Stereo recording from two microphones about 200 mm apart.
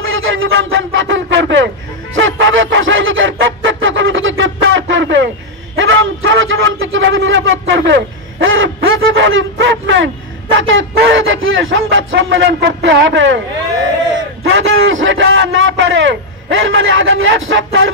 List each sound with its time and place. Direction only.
0.0 s a man's voice: 80° right
2.1 s a sound: 70° right (ahead or behind)
5.8 s a man's voice: 70° right (ahead or behind)
14.5 s a man's voice: 75° right (ahead or behind)